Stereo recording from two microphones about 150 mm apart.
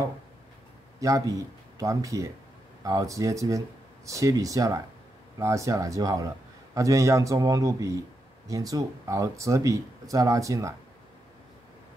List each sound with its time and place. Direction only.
1.0 s a man's voice: 20° right (ahead or behind)